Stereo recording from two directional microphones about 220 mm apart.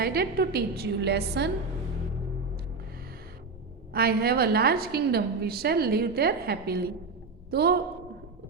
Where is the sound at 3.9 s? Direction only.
45° right (ahead or behind).